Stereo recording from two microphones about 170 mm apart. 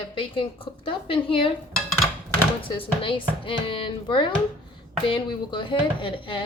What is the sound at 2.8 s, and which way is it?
Speech, 30° left (ahead or behind).